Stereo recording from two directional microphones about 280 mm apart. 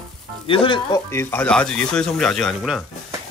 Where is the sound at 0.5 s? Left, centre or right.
Centre.